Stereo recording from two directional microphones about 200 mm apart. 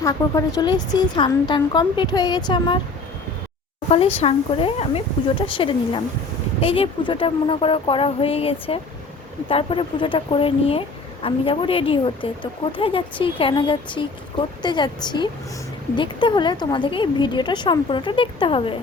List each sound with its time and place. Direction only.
0.0 s speech: 15° left (ahead or behind)
3.8 s speech: 30° left (ahead or behind)